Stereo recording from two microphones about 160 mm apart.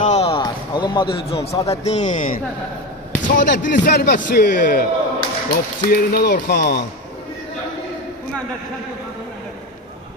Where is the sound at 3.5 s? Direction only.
90° left.